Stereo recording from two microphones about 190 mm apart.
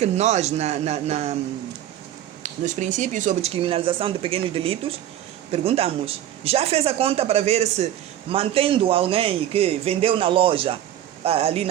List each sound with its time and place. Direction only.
0.0 s speech: 35° right (ahead or behind)
2.4 s speech: 40° right (ahead or behind)